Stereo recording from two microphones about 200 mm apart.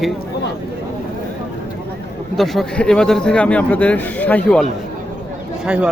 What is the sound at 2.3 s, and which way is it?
A man's voice, centre (ahead or behind).